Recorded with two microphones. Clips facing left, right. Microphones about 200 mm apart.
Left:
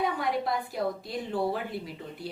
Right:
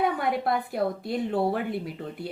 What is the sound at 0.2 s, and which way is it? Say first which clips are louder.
A woman's voice: right 3 dB; 60° right (ahead or behind).